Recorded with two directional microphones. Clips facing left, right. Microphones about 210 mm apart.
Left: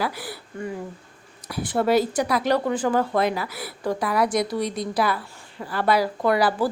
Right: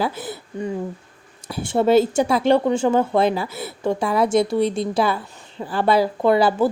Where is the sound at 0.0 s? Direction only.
20° right (ahead or behind).